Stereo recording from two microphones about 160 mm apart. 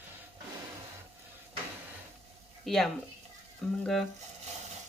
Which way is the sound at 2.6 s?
Centre (ahead or behind).